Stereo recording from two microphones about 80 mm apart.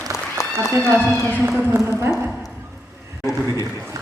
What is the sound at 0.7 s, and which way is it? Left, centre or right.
Speech, right.